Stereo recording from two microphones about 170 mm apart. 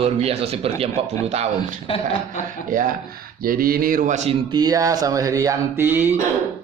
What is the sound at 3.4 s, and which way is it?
Speech, 60° right (ahead or behind).